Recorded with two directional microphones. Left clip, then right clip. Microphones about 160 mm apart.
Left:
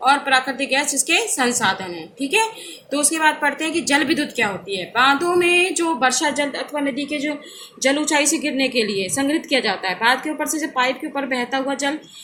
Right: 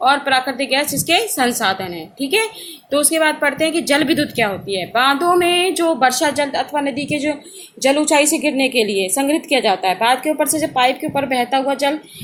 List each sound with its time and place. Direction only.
0.0 s a woman's voice: 55° right (ahead or behind)